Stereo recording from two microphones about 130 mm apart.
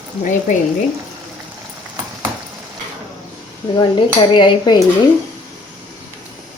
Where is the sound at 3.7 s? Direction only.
35° left (ahead or behind).